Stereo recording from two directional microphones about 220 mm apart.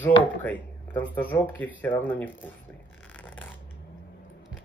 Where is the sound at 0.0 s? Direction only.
10° left (ahead or behind).